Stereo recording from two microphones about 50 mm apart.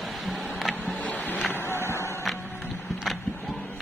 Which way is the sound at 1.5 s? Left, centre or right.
Left.